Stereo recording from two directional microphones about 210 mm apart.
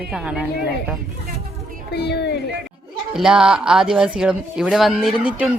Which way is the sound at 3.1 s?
5° right (ahead or behind).